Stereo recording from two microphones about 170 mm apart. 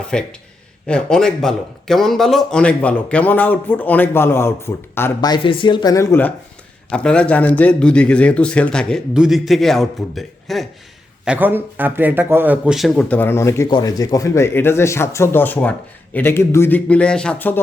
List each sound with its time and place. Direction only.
0.1 s a man's voice: 5° left (ahead or behind)
5.3 s speech: 30° left (ahead or behind); by 10.7 s centre (ahead or behind)
11.3 s a man's voice: 10° right (ahead or behind); by 17.6 s 10° left (ahead or behind)